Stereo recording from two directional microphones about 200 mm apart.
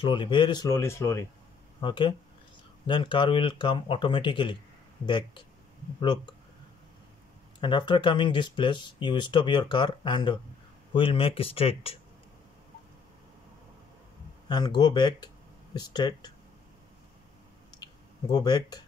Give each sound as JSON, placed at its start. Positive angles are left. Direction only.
{"t": 0.0, "sound": "speech", "side_deg": 25}
{"t": 7.6, "sound": "speech", "side_deg": 25}
{"t": 14.5, "sound": "speech", "side_deg": 20}
{"t": 18.3, "sound": "speech", "side_deg": 20}